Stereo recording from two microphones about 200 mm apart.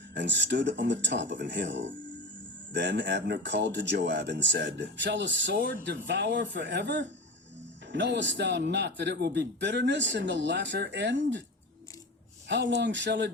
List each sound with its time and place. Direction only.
0.2 s speech: 60° right (ahead or behind)
12.5 s speech: 60° right (ahead or behind)